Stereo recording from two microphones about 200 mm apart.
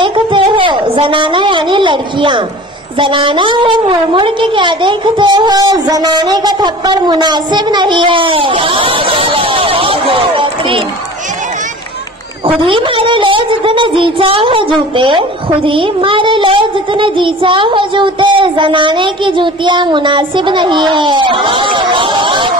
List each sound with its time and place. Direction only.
0.0 s a sound: 25° right (ahead or behind)
3.0 s speech: 25° right (ahead or behind)
12.4 s speech: 25° right (ahead or behind)